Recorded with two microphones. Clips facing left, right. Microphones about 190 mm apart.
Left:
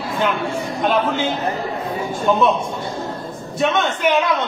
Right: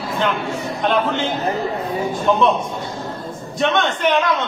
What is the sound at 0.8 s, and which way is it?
Speech, 5° left (ahead or behind).